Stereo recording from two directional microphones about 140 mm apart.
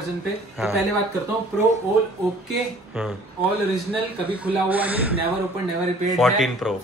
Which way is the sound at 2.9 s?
5° right (ahead or behind).